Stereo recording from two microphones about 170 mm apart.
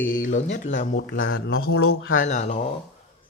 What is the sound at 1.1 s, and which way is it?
Speech, 60° left (ahead or behind).